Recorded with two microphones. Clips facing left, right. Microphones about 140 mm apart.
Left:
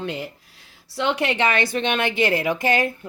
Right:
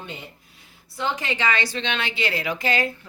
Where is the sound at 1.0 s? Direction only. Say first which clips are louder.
Left 5 dB; 75° left (ahead or behind).